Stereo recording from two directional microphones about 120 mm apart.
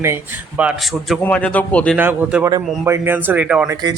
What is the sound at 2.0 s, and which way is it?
Speech, 15° right (ahead or behind).